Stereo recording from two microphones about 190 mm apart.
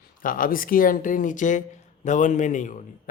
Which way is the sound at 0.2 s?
45° left (ahead or behind).